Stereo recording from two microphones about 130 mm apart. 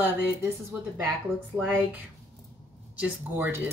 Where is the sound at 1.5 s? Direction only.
30° right (ahead or behind).